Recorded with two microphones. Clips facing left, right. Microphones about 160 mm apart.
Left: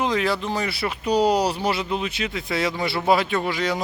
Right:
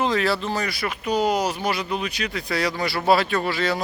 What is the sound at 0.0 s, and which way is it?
Speech, 15° left (ahead or behind).